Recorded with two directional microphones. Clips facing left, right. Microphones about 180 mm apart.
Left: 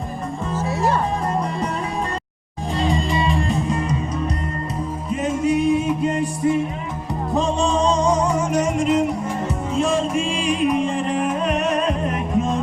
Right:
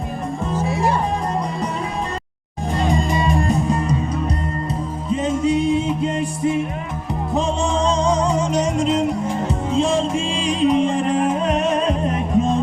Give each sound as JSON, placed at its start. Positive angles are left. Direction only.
{"t": 0.5, "sound": "music", "side_deg": -15}
{"t": 2.7, "sound": "music", "side_deg": -45}
{"t": 5.1, "sound": "music", "side_deg": -25}